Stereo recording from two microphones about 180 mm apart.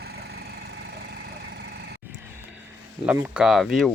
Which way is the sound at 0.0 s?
60° right (ahead or behind).